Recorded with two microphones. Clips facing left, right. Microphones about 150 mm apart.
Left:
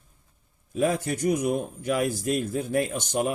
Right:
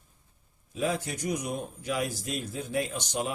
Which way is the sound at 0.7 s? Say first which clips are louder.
Left 6 dB; 50° left (ahead or behind).